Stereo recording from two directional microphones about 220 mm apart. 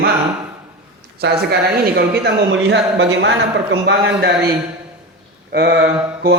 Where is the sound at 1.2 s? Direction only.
50° right (ahead or behind).